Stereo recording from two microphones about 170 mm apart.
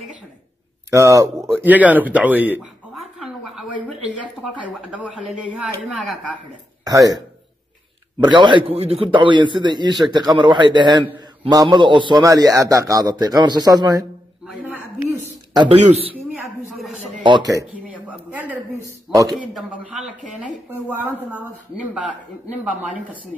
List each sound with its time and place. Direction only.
0.8 s speech: 20° right (ahead or behind)
3.0 s a sound: centre (ahead or behind)
4.4 s speech: 5° right (ahead or behind)
6.8 s speech: 20° right (ahead or behind)
8.2 s a man's voice: 25° right (ahead or behind)
15.8 s a man's voice: 35° right (ahead or behind)
16.3 s a sound: centre (ahead or behind)
17.2 s a man's voice: 25° right (ahead or behind)
17.7 s a sound: 10° right (ahead or behind)
19.1 s speech: centre (ahead or behind)